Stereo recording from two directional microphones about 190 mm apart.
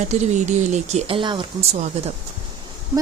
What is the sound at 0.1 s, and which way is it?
Speech, 35° right (ahead or behind).